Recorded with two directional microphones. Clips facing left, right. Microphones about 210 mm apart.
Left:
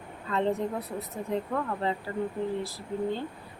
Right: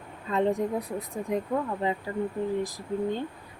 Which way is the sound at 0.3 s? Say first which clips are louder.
Right 2 dB; 15° right (ahead or behind).